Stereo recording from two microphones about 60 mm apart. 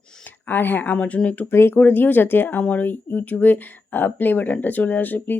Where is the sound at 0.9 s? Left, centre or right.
Left.